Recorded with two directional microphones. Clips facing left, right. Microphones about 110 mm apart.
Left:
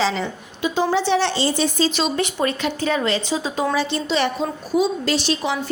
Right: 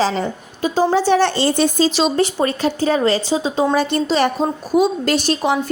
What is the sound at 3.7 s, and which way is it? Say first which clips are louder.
A woman's voice: right 4 dB; 50° right (ahead or behind).